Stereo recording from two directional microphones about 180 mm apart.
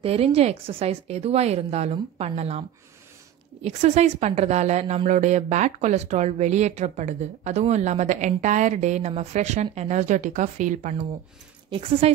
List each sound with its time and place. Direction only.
0.0 s a woman's voice: 35° right (ahead or behind)
3.6 s a woman's voice: 40° right (ahead or behind)
12.0 s a woman's voice: 35° right (ahead or behind)